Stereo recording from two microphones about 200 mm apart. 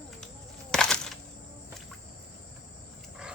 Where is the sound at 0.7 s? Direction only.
5° left (ahead or behind).